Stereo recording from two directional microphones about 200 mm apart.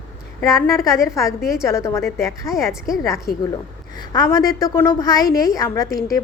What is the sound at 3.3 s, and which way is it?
Speech, 50° left (ahead or behind).